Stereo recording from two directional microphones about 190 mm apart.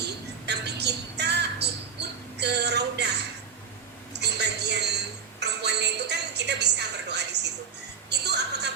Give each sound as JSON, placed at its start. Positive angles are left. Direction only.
{"t": 0.0, "sound": "music", "side_deg": -60}
{"t": 4.1, "sound": "a sound", "side_deg": -60}
{"t": 5.4, "sound": "music", "side_deg": -60}